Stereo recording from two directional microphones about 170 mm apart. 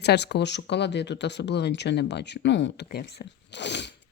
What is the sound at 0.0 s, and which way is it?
Speech, 80° left.